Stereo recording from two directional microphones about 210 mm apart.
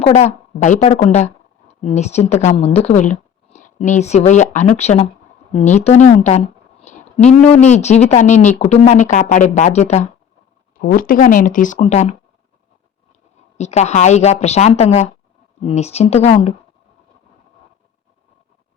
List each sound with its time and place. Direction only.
0.0 s a woman's voice: 30° left (ahead or behind)
10.8 s speech: 40° left (ahead or behind)
13.6 s speech: 30° left (ahead or behind)